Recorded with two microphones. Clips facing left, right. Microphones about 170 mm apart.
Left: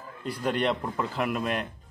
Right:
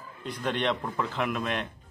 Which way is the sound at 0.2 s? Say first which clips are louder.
Left 2 dB; 5° left (ahead or behind).